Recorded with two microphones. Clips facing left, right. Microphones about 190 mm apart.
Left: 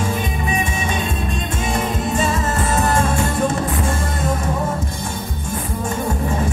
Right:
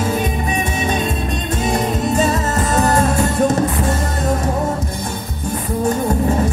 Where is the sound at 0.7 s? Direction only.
40° right (ahead or behind).